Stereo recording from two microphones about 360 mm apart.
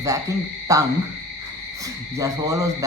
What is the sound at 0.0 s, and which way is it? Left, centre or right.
Speech, centre.